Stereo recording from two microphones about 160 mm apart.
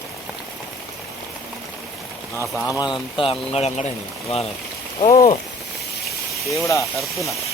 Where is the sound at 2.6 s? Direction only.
20° left (ahead or behind).